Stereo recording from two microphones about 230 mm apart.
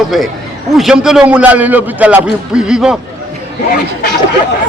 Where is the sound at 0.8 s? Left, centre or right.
Centre.